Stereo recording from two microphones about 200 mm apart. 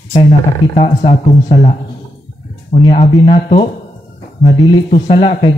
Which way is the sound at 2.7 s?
40° left (ahead or behind).